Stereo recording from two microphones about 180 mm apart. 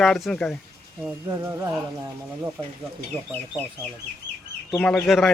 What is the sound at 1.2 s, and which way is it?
Speech, 20° right (ahead or behind).